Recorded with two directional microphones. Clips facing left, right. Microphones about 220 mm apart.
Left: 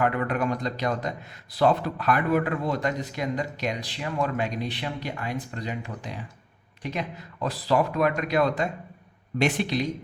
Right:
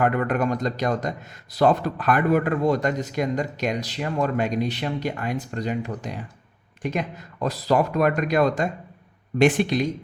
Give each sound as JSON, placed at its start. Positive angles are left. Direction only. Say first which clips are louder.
{"t": 0.0, "sound": "a man's voice", "louder": "right 3 dB", "side_deg": -45}